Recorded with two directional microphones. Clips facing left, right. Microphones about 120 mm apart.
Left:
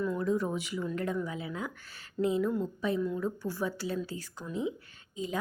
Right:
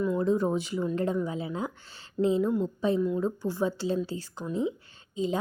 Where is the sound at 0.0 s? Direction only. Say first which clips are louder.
Right 4 dB; 20° right (ahead or behind).